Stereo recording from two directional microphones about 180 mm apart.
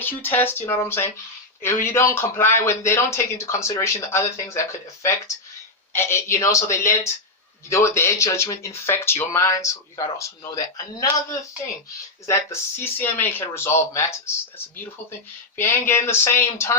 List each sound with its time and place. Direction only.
0.0 s a man's voice: 10° left (ahead or behind)
15.5 s a man's voice: 15° left (ahead or behind)